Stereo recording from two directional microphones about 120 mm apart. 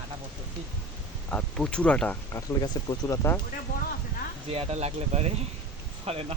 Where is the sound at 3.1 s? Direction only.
20° left (ahead or behind).